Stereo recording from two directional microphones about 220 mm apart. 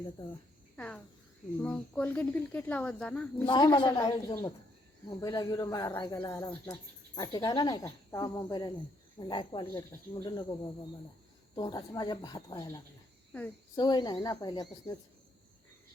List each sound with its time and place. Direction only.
0.8 s cricket: 5° left (ahead or behind)
1.6 s speech: 5° left (ahead or behind)
3.4 s speech: 20° left (ahead or behind)